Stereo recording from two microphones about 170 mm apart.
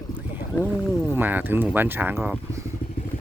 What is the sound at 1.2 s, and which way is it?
Speech, 10° right (ahead or behind).